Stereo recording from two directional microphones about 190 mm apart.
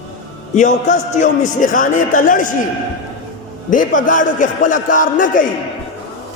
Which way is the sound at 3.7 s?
45° left (ahead or behind).